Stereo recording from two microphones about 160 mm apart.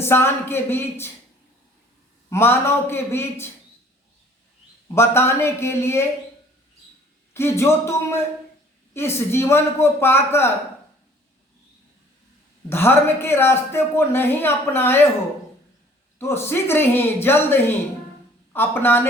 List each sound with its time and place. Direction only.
0.0 s speech: 15° left (ahead or behind)
2.3 s speech: 15° left (ahead or behind)
4.9 s speech: 15° left (ahead or behind)
7.3 s speech: 15° left (ahead or behind)
12.6 s speech: 15° left (ahead or behind)
16.1 s speech: 15° left (ahead or behind)